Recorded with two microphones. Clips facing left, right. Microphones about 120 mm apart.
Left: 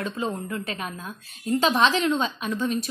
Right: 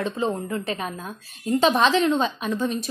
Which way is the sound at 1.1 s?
15° right (ahead or behind).